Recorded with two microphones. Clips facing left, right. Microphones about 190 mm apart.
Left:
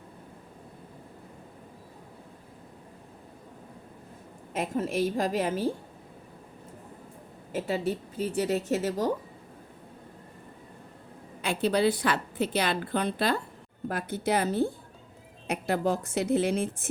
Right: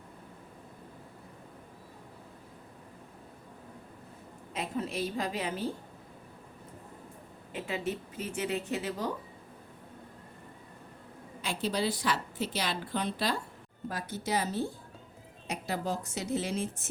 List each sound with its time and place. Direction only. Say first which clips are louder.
4.5 s a woman's voice: left 6 dB; 45° left (ahead or behind)
7.5 s a woman's voice: left 5 dB; 35° left (ahead or behind)
11.4 s a woman's voice: left 7 dB; 60° left (ahead or behind)